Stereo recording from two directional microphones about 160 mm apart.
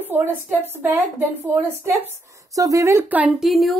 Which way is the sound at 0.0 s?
15° right (ahead or behind).